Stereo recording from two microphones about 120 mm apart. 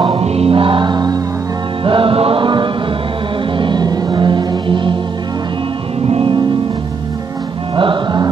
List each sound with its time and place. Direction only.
0.0 s music: 50° right (ahead or behind); by 1.2 s 35° right (ahead or behind)
1.9 s chant: 45° right (ahead or behind)
3.5 s music: 40° right (ahead or behind)
6.0 s music: 50° right (ahead or behind)
7.7 s music: 45° right (ahead or behind)